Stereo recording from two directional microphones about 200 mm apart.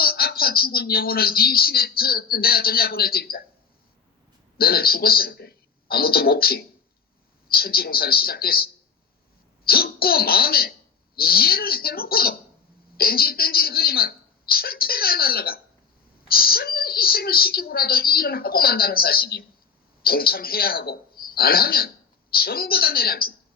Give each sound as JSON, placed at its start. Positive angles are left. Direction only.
{"t": 0.0, "sound": "speech", "side_deg": 50}
{"t": 4.5, "sound": "a woman's voice", "side_deg": 50}